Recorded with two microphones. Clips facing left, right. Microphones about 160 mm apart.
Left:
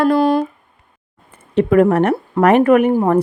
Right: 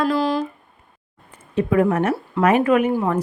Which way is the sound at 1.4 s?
65° left (ahead or behind).